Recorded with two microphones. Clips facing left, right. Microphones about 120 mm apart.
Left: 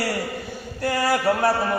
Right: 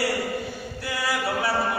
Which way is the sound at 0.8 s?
45° left (ahead or behind).